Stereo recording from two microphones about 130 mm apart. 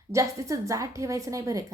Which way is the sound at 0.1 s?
25° right (ahead or behind).